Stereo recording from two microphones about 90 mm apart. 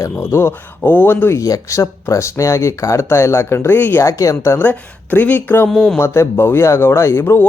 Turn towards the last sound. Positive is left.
turn(degrees=30)  # may be behind; listen again after turning